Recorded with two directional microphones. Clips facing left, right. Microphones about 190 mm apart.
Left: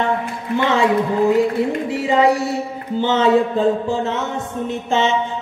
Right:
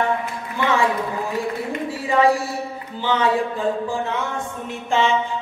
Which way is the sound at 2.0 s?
20° left (ahead or behind).